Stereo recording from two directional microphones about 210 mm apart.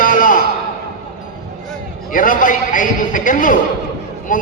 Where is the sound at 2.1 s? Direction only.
40° left (ahead or behind).